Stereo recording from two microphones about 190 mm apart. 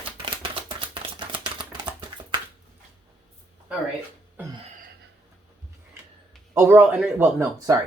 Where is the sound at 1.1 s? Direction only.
25° right (ahead or behind).